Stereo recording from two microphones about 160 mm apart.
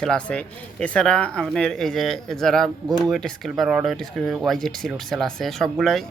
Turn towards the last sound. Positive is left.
turn(degrees=0)  # may be behind; listen again after turning